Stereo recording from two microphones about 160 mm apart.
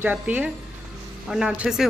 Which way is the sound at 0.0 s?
10° right (ahead or behind).